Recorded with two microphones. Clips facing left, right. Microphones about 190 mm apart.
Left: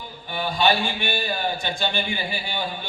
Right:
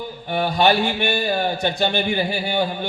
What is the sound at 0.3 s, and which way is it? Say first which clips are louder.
A man's voice: right 4 dB; 65° right (ahead or behind).